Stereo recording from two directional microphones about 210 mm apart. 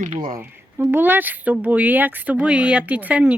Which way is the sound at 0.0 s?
40° right (ahead or behind).